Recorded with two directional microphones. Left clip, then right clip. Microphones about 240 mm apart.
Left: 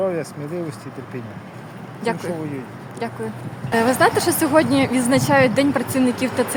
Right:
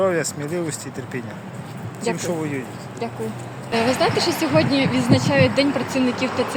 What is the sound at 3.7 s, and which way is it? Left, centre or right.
Speech, left.